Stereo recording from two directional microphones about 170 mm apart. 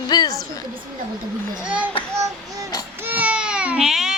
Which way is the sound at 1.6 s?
5° right (ahead or behind).